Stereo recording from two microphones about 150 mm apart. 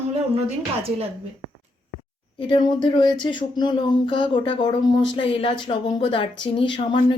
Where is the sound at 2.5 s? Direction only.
30° left (ahead or behind).